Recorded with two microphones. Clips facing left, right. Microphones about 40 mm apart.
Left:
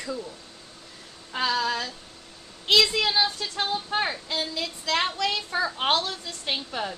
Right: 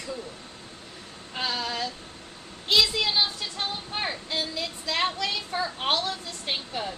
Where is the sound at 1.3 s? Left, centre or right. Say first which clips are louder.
Left 4 dB; left.